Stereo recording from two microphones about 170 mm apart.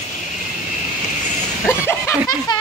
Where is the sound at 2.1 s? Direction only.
25° left (ahead or behind).